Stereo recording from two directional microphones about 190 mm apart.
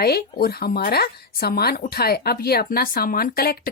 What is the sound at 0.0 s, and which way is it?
Speech, 55° left (ahead or behind).